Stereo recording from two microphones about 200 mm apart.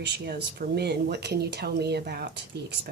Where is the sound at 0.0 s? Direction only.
55° right (ahead or behind).